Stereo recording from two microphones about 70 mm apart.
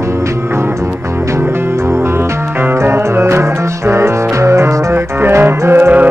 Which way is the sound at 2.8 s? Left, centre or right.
Right.